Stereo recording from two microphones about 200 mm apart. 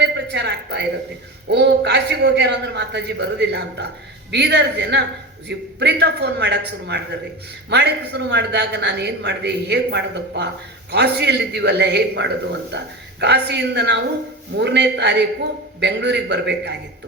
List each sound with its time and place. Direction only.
0.0 s a woman's voice: 60° right (ahead or behind)